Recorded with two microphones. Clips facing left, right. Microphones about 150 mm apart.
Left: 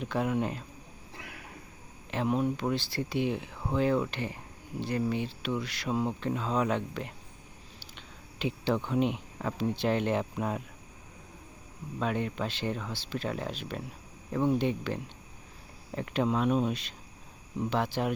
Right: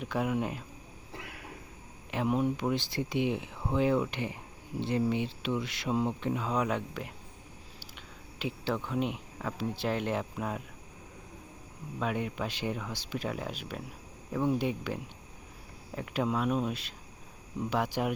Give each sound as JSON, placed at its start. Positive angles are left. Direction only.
{"t": 0.0, "sound": "speech", "side_deg": -10}
{"t": 2.0, "sound": "speech", "side_deg": -10}
{"t": 8.4, "sound": "speech", "side_deg": 0}
{"t": 11.9, "sound": "speech", "side_deg": -5}